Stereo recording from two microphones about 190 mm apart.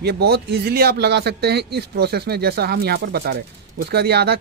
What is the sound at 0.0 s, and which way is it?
Speech, 60° right (ahead or behind).